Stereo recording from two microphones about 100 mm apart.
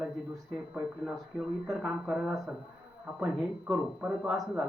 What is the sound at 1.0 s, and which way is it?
Speech, centre (ahead or behind).